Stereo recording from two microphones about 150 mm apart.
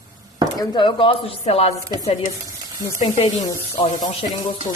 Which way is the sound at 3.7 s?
40° left (ahead or behind).